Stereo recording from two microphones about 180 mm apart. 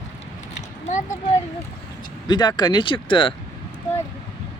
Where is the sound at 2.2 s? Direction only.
25° left (ahead or behind).